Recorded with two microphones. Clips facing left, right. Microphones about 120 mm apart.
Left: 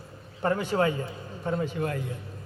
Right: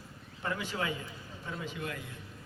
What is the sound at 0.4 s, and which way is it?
A man's voice, 50° left (ahead or behind).